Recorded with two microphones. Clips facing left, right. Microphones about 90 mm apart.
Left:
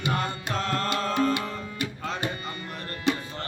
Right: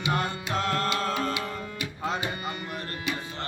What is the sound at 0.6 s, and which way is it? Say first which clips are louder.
Music: right 1 dB; 35° left (ahead or behind).